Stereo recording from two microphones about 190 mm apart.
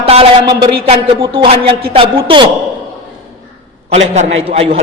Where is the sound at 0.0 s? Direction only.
30° right (ahead or behind).